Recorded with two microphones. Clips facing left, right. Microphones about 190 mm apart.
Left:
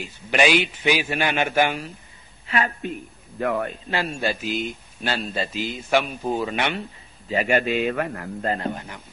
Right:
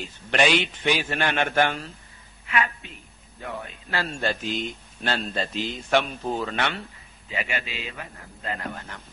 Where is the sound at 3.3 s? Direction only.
85° left.